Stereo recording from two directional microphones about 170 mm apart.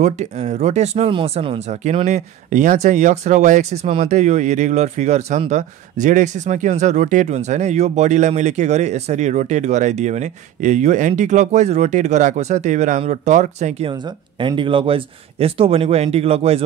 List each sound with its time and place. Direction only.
0.0 s speech: 45° right (ahead or behind)
14.4 s speech: 30° right (ahead or behind)